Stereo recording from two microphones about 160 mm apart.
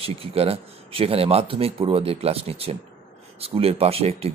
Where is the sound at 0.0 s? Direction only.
35° right (ahead or behind).